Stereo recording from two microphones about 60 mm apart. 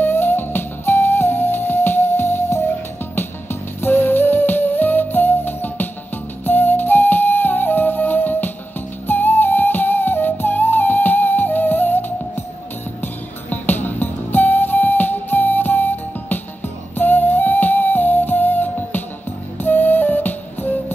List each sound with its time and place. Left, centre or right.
0.0 s music: left